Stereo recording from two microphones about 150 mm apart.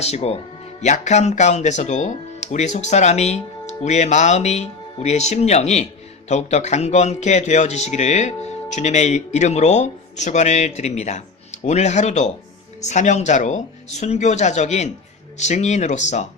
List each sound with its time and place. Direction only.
0.0 s a man's voice: 45° left (ahead or behind)